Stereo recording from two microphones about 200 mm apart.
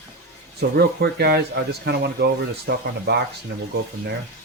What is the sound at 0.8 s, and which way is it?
Speech, 50° right (ahead or behind).